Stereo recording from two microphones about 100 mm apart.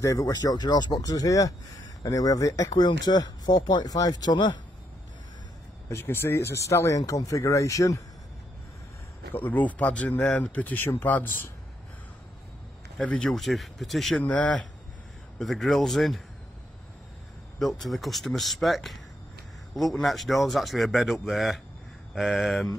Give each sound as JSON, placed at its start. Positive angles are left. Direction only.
{"t": 0.0, "sound": "speech", "side_deg": 35}
{"t": 5.9, "sound": "speech", "side_deg": 25}
{"t": 9.3, "sound": "speech", "side_deg": 15}
{"t": 12.9, "sound": "speech", "side_deg": 10}
{"t": 14.1, "sound": "speech", "side_deg": 15}
{"t": 15.3, "sound": "speech", "side_deg": 0}
{"t": 17.6, "sound": "speech", "side_deg": 0}